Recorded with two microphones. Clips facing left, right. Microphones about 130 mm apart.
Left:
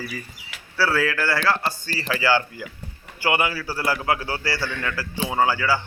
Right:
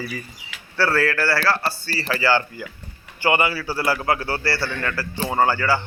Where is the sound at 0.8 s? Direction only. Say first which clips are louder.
Right 2 dB; 10° left (ahead or behind).